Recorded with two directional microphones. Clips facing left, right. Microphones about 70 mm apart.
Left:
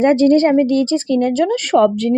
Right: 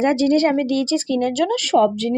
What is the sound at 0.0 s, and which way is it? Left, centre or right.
Speech, left.